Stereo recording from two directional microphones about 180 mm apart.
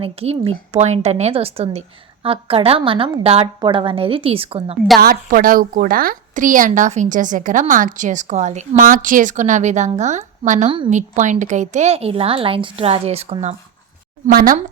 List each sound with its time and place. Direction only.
0.0 s a woman's voice: 35° right (ahead or behind)
4.9 s a woman's voice: 55° right (ahead or behind); by 13.6 s 35° right (ahead or behind)
14.3 s a woman's voice: 50° right (ahead or behind)